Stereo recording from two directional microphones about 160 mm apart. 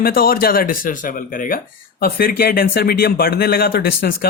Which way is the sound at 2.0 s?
70° left (ahead or behind).